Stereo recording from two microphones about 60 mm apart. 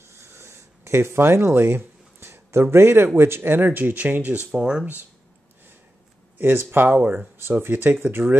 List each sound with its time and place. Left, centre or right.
0.1 s a sound: right
3.2 s speech: right
4.6 s speech: centre
6.3 s speech: right